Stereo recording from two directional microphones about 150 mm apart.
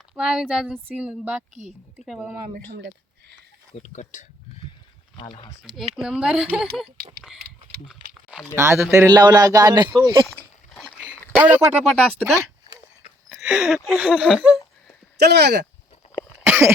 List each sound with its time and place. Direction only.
0.1 s speech: 5° right (ahead or behind)
3.8 s speech: 50° left (ahead or behind)
5.1 s speech: 35° left (ahead or behind)
5.9 s speech: 5° right (ahead or behind)
8.5 s a man's voice: 15° right (ahead or behind)
10.8 s dog: centre (ahead or behind)
11.3 s speech: 10° right (ahead or behind)
12.2 s a sound: 20° right (ahead or behind)
13.3 s a sound: 5° right (ahead or behind)
13.8 s speech: 5° right (ahead or behind)
15.2 s speech: 90° right
16.5 s cough: 15° right (ahead or behind)